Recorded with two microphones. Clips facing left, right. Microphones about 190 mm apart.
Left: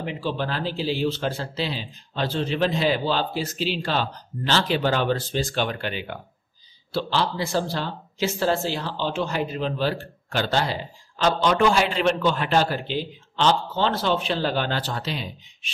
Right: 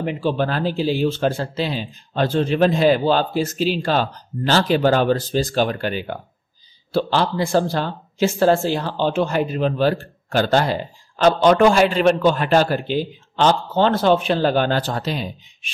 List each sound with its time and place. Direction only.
0.0 s speech: 50° right (ahead or behind)